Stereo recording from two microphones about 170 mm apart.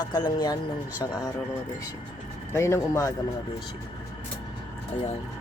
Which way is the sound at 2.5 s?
15° left (ahead or behind).